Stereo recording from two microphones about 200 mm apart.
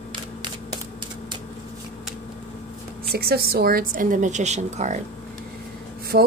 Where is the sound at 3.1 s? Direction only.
50° right (ahead or behind); by 5.0 s 35° right (ahead or behind).